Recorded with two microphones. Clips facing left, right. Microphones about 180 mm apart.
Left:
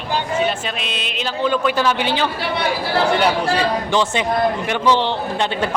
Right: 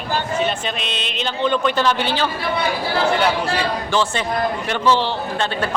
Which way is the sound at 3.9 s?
15° left (ahead or behind).